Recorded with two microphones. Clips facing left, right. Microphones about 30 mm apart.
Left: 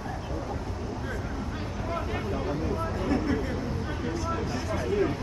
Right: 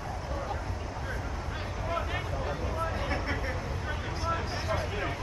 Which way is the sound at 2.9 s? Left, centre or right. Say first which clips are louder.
Left 5 dB; right.